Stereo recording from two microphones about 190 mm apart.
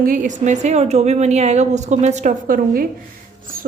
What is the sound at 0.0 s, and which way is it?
A woman's voice, 45° right (ahead or behind).